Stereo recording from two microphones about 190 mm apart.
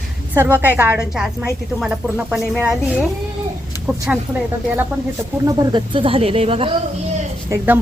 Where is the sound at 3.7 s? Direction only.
20° left (ahead or behind).